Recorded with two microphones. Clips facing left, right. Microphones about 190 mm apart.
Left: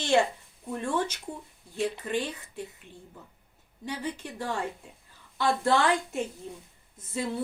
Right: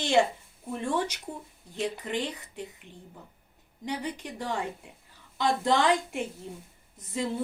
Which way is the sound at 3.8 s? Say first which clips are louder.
Right 1 dB; 15° right (ahead or behind).